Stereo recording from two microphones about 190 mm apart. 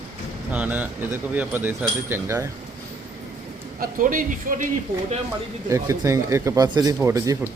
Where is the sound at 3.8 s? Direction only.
45° right (ahead or behind).